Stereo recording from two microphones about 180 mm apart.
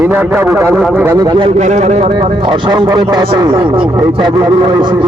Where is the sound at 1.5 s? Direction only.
40° right (ahead or behind).